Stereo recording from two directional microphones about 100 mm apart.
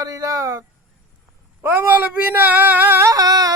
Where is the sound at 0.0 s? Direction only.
35° right (ahead or behind).